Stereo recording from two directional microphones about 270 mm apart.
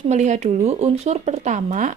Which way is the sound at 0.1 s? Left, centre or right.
Right.